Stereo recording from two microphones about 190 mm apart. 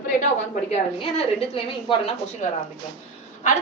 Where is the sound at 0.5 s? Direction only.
30° left (ahead or behind).